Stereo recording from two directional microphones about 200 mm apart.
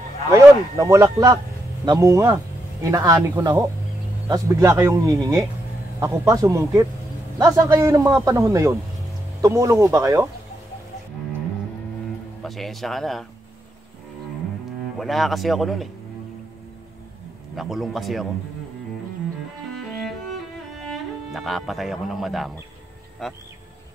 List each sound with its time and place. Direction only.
0.3 s speech: 15° right (ahead or behind)
12.4 s speech: centre (ahead or behind)
15.0 s speech: centre (ahead or behind)
17.6 s speech: centre (ahead or behind)
20.7 s speech: centre (ahead or behind)